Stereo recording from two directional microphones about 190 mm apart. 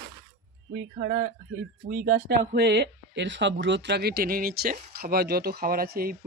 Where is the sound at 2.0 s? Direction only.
60° right (ahead or behind).